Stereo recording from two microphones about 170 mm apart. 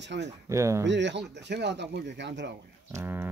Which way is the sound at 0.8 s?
90° right.